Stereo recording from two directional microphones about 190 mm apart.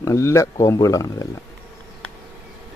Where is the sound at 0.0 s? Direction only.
15° left (ahead or behind).